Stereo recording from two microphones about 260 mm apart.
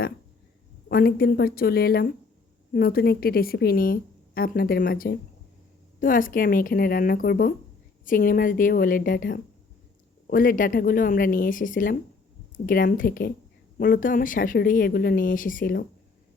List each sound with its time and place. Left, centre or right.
0.9 s a woman's voice: left